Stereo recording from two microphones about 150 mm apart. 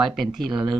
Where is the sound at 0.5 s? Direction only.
30° right (ahead or behind).